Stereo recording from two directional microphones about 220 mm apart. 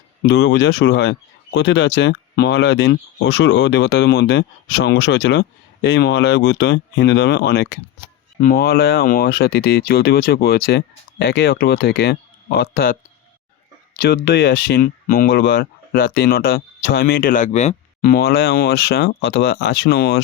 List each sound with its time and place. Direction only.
0.2 s speech: 50° left (ahead or behind)